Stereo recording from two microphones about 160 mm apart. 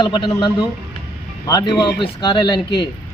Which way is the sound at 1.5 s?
25° left (ahead or behind).